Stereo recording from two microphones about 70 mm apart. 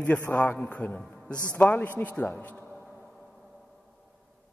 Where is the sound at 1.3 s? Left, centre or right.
Centre.